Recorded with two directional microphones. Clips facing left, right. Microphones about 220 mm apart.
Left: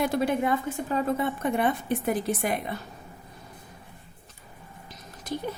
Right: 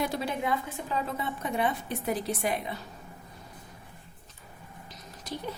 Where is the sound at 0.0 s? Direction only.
55° left (ahead or behind).